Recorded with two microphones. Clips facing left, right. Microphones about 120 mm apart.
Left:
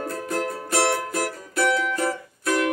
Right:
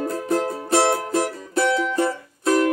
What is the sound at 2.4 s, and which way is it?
Music, 30° right (ahead or behind).